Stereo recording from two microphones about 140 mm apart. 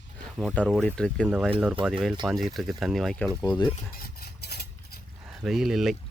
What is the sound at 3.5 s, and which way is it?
Cutlery, 30° left (ahead or behind).